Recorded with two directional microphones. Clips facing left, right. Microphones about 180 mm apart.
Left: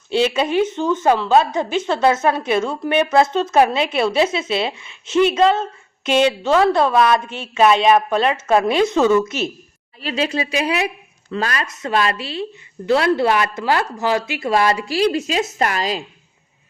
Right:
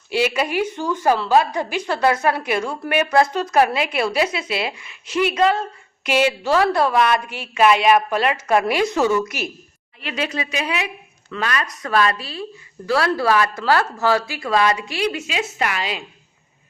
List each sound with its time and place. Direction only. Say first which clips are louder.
0.1 s a woman's voice: left 3 dB; 25° left (ahead or behind)